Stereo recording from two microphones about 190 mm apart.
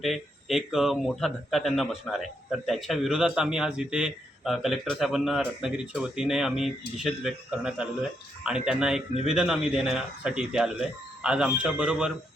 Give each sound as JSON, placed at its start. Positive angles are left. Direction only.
{"t": 0.0, "sound": "a man's voice", "side_deg": 0}